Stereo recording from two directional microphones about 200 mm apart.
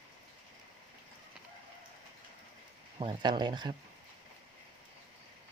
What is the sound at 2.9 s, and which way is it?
Speech, 25° right (ahead or behind).